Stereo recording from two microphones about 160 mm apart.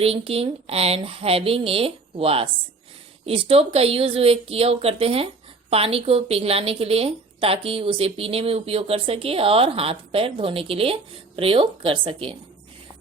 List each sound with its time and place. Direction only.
0.0 s a woman's voice: 35° right (ahead or behind)